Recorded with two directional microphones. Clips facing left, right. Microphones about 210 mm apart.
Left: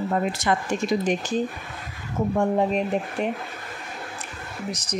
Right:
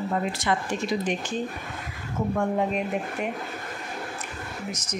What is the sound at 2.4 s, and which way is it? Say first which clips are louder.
Speech: left 4 dB; 30° left (ahead or behind).